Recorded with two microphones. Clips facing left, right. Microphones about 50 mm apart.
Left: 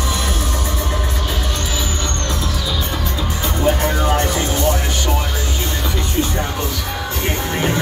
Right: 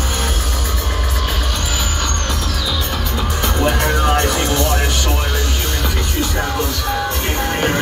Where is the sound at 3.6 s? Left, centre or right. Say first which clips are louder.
Even; right.